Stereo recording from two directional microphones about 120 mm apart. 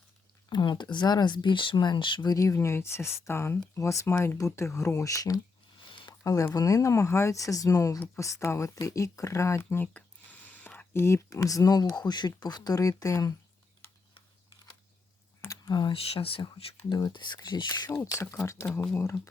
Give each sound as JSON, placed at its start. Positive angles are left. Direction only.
{"t": 0.5, "sound": "speech", "side_deg": 40}
{"t": 2.3, "sound": "speech", "side_deg": 25}
{"t": 5.9, "sound": "a sound", "side_deg": 45}
{"t": 6.2, "sound": "speech", "side_deg": 30}
{"t": 10.6, "sound": "a sound", "side_deg": 10}
{"t": 10.9, "sound": "speech", "side_deg": 25}
{"t": 15.4, "sound": "a sound", "side_deg": 25}
{"t": 15.7, "sound": "speech", "side_deg": 45}
{"t": 18.0, "sound": "speech", "side_deg": 25}